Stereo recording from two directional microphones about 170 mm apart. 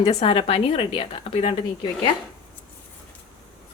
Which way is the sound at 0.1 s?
35° left (ahead or behind).